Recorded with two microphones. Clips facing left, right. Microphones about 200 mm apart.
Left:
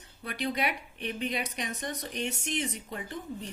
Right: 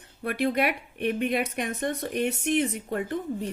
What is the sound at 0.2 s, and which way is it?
A woman's voice, 55° right (ahead or behind).